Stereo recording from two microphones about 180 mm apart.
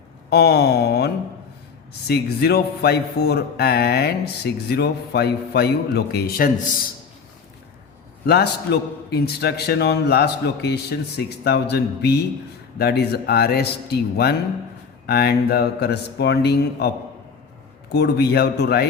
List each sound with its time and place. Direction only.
0.3 s a man's voice: 65° left (ahead or behind)
8.3 s a man's voice: 65° left (ahead or behind)
17.9 s a man's voice: 65° left (ahead or behind)